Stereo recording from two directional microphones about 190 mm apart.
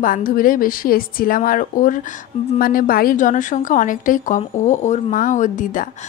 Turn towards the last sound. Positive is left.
turn(degrees=40)  # may be behind; listen again after turning